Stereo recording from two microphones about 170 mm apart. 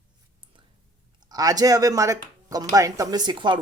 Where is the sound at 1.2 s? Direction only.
20° right (ahead or behind).